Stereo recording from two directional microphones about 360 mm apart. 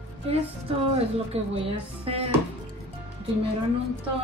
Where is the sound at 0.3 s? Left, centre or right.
Centre.